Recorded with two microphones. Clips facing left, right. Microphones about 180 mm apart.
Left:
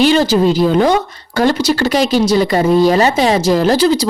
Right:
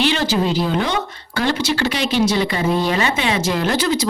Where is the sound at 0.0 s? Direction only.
40° left (ahead or behind).